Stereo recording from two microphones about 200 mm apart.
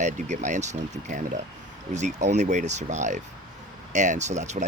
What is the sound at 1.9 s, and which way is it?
Speech, 35° right (ahead or behind).